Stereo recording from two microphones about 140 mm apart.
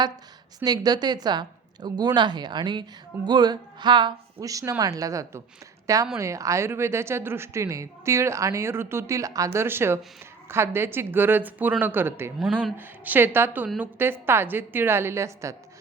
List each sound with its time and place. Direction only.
0.6 s a woman's voice: 30° right (ahead or behind)